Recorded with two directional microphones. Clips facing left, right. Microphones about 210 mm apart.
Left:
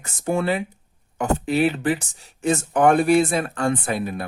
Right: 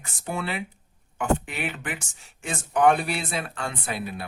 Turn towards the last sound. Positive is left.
turn(degrees=45)  # may be behind; listen again after turning